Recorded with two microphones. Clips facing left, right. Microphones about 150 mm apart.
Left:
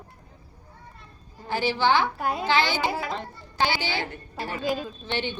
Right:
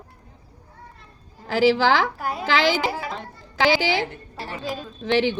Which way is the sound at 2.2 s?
Centre (ahead or behind).